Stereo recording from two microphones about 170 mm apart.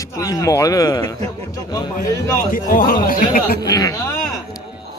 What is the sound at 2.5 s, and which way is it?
Speech, 55° left (ahead or behind).